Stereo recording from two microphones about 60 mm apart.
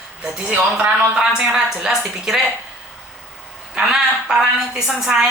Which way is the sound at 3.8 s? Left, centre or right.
Centre.